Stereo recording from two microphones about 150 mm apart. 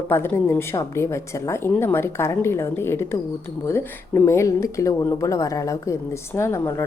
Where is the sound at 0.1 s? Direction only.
15° left (ahead or behind).